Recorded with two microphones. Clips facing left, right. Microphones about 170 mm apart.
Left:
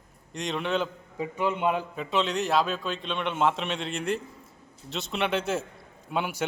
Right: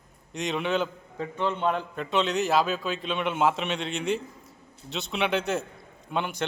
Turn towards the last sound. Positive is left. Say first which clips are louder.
# even
turn(degrees=5)  # may be behind; listen again after turning